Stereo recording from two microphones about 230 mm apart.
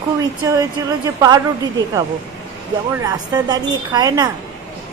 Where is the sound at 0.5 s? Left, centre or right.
Centre.